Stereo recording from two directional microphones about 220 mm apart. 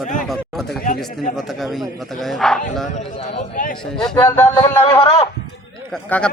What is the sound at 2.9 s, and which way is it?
Speech, 35° left (ahead or behind).